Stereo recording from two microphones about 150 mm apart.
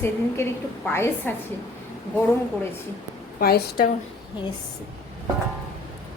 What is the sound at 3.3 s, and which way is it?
Speech, 90° left.